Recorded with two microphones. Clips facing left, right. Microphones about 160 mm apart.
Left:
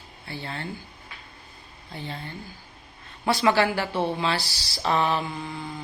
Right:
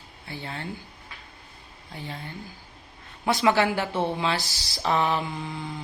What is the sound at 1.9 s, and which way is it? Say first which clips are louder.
Speech: left 2 dB; 10° right (ahead or behind).